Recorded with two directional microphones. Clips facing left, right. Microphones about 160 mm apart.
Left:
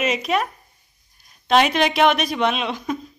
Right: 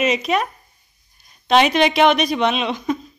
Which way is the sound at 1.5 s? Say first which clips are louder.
Right 2 dB; centre (ahead or behind).